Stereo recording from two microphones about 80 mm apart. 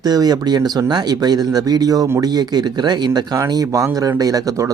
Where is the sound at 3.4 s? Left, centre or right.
Right.